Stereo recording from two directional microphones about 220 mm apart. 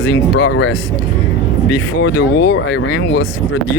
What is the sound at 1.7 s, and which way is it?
Speech, 55° left (ahead or behind).